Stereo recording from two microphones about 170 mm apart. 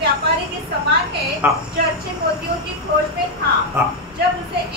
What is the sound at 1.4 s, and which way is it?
Speech, 10° right (ahead or behind).